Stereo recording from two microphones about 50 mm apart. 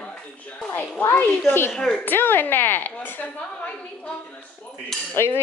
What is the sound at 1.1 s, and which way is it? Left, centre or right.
Speech, left.